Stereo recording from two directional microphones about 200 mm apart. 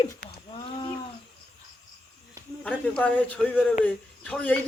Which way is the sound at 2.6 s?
5° left (ahead or behind).